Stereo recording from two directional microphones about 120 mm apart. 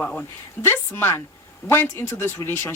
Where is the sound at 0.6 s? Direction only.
20° left (ahead or behind).